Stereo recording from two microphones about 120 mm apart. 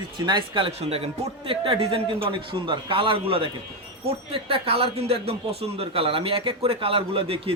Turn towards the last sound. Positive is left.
turn(degrees=-50)  # may be behind; listen again after turning